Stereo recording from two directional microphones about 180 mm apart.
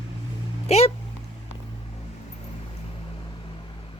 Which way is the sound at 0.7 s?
35° left (ahead or behind).